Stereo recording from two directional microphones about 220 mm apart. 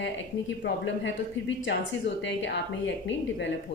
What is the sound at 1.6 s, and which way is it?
A woman's voice, 55° left (ahead or behind).